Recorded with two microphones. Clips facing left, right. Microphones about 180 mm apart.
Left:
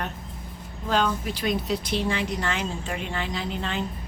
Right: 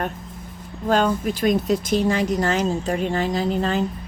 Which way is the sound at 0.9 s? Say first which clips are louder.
Right 5 dB; 45° right (ahead or behind).